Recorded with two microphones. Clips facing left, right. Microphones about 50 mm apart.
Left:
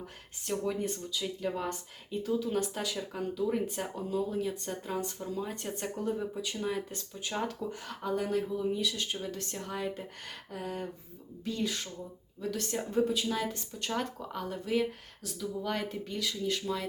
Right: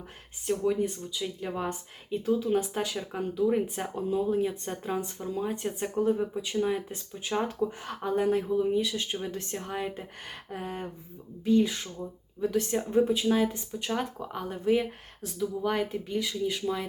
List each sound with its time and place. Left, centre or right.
0.4 s speech: centre
1.1 s speech: centre
2.2 s speech: right
4.9 s speech: right